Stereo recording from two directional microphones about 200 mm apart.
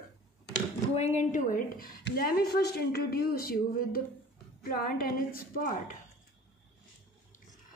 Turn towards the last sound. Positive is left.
turn(degrees=40)  # may be behind; listen again after turning